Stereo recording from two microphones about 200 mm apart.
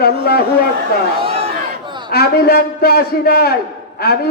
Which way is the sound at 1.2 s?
30° right (ahead or behind).